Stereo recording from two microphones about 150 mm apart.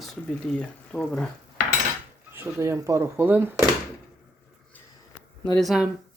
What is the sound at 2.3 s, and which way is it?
Speech, 15° right (ahead or behind).